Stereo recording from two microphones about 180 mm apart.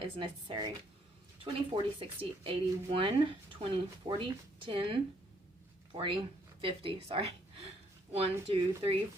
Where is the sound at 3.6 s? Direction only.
35° right (ahead or behind).